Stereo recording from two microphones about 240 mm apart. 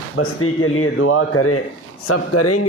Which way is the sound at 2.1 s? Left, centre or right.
Left.